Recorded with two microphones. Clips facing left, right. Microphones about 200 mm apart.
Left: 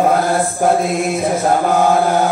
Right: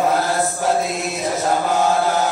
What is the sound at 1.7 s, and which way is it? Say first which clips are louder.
Chant: left 4 dB; 55° left (ahead or behind).